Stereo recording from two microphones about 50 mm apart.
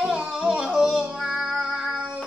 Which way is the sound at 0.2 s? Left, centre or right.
Centre.